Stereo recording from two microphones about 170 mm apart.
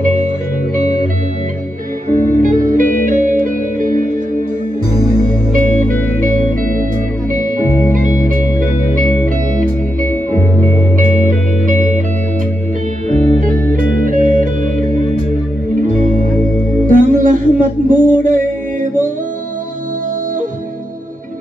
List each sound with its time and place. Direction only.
2.2 s music: 50° right (ahead or behind)
13.1 s music: 45° right (ahead or behind)